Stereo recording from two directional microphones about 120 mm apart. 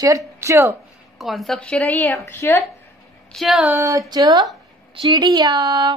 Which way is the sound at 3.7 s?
25° right (ahead or behind).